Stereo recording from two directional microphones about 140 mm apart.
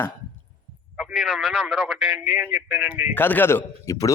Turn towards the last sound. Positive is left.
turn(degrees=20)  # may be behind; listen again after turning